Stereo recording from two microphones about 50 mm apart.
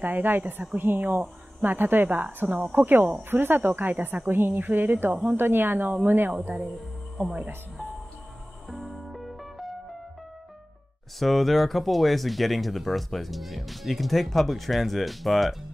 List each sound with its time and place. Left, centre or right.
0.0 s speech: right
5.4 s speech: right
8.6 s music: centre
11.1 s speech: centre